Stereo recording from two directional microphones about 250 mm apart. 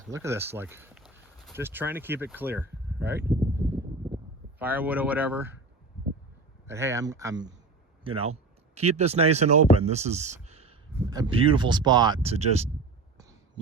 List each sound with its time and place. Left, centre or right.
0.1 s a sound: centre
1.5 s speech: centre
6.7 s speech: centre
9.0 s speech: right